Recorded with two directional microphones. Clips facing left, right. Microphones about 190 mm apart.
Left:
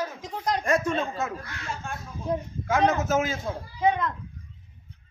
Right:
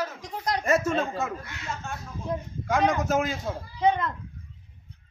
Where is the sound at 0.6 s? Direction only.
5° right (ahead or behind).